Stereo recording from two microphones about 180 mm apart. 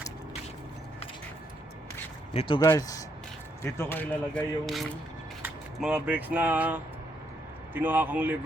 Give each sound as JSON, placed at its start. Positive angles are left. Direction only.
{"t": 2.3, "sound": "speech", "side_deg": 30}
{"t": 2.6, "sound": "a man's voice", "side_deg": 15}